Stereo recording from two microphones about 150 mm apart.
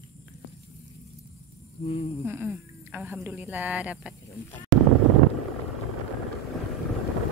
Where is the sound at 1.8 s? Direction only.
40° left (ahead or behind).